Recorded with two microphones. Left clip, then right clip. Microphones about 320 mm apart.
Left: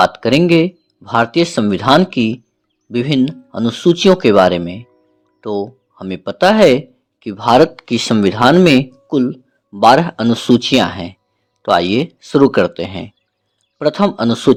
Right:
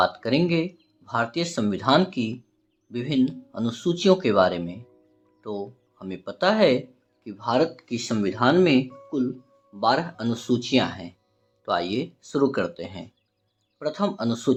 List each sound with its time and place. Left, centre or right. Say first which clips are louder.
0.0 s speech: left 10 dB; left